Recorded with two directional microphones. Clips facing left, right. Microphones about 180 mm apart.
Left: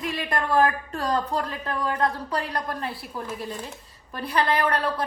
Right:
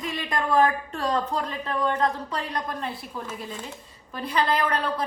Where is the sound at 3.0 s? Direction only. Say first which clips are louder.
Left 2 dB; centre (ahead or behind).